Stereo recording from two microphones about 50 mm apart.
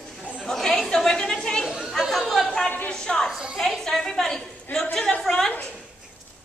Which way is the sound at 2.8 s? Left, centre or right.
Centre.